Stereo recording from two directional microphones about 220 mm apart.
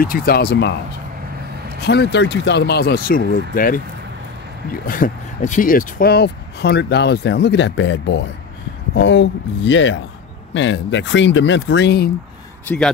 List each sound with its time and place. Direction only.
0.0 s speech: 40° left (ahead or behind)
1.9 s speech: 50° left (ahead or behind)
4.8 s speech: 40° left (ahead or behind)
12.6 s speech: 5° left (ahead or behind)